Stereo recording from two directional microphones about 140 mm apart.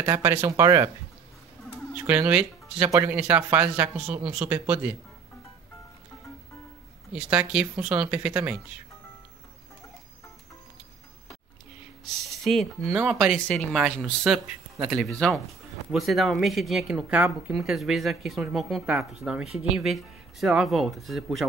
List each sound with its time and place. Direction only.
0.0 s speech: 15° right (ahead or behind)
1.9 s speech: 10° right (ahead or behind)
7.1 s speech: 10° right (ahead or behind)
12.0 s speech: centre (ahead or behind)